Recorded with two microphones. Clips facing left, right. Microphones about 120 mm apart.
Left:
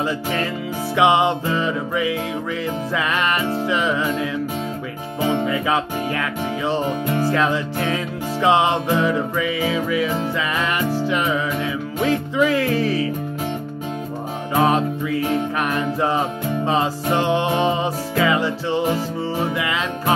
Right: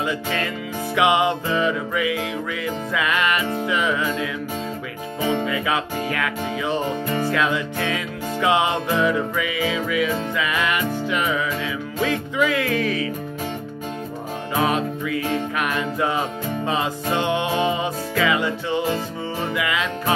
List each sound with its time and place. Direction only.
0.9 s music: 25° left (ahead or behind)
5.5 s music: 25° left (ahead or behind)
14.5 s music: 30° left (ahead or behind)